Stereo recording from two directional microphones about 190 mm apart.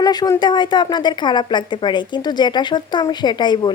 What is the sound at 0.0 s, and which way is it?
A woman's voice, 20° left (ahead or behind).